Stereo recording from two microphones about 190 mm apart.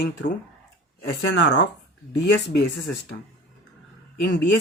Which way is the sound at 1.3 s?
70° left (ahead or behind).